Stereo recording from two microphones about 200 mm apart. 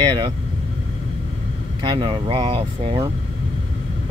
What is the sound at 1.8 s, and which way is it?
Speech, 25° right (ahead or behind).